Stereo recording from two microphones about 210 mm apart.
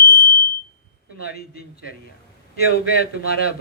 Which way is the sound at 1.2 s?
45° left (ahead or behind).